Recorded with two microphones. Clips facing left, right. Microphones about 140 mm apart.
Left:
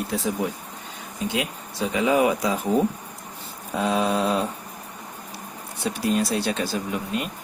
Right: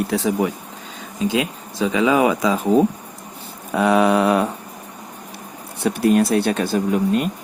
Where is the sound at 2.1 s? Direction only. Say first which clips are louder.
Right 2 dB; 90° right.